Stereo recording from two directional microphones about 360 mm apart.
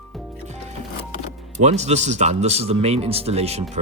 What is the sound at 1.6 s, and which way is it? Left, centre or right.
Speech, centre.